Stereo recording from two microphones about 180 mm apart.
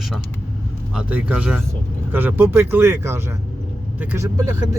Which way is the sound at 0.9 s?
5° right (ahead or behind).